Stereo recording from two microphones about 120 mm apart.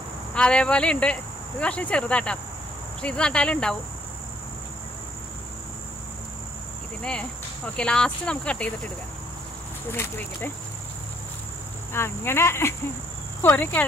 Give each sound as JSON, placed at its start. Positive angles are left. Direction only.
{"t": 0.3, "sound": "speech", "side_deg": 10}
{"t": 7.0, "sound": "speech", "side_deg": 10}
{"t": 9.9, "sound": "speech", "side_deg": 20}
{"t": 11.9, "sound": "speech", "side_deg": 20}